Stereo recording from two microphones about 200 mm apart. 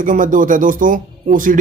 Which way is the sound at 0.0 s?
40° right (ahead or behind).